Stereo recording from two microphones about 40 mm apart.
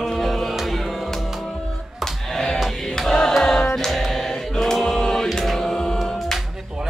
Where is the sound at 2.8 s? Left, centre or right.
Centre.